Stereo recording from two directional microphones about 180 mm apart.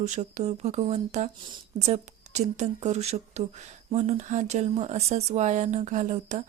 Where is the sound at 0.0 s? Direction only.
40° right (ahead or behind).